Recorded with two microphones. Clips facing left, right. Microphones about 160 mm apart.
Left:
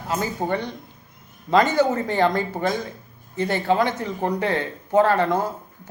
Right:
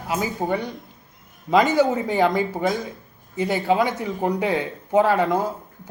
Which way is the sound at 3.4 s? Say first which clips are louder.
Even; 15° right (ahead or behind).